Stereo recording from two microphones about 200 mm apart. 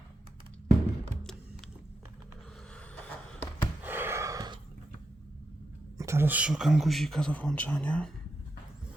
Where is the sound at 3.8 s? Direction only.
10° right (ahead or behind).